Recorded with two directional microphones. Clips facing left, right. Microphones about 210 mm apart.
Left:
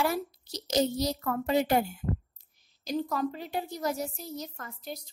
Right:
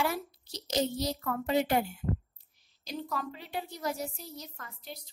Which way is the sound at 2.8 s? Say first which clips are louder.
Left 7 dB; 45° left (ahead or behind).